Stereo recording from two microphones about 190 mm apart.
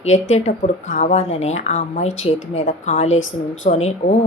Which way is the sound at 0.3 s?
40° left (ahead or behind).